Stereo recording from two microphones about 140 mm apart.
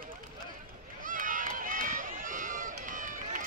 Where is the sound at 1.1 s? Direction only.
70° right (ahead or behind).